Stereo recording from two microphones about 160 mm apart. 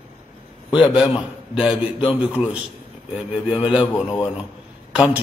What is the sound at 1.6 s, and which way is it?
A man's voice, 5° right (ahead or behind).